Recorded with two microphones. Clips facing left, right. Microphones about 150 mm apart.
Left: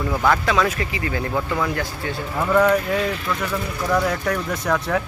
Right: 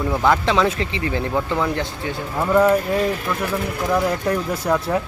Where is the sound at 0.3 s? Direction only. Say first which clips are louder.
Right 2 dB; 25° right (ahead or behind).